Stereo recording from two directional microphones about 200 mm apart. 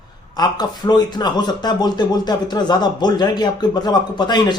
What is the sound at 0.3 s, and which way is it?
Speech, 20° left (ahead or behind).